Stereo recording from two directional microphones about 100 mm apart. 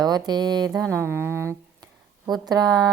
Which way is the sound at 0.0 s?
45° right (ahead or behind).